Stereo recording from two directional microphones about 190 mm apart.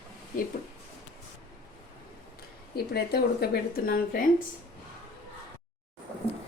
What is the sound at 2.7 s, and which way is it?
Speech, 55° left (ahead or behind).